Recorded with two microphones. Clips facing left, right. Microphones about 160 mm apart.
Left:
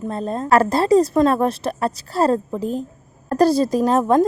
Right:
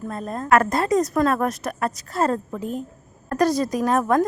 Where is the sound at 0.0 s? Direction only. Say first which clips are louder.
Left 5 dB; 30° left (ahead or behind).